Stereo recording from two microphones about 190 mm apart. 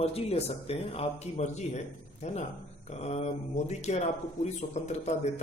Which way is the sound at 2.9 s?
35° left (ahead or behind).